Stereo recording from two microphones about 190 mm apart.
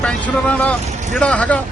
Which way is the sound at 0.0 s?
5° left (ahead or behind).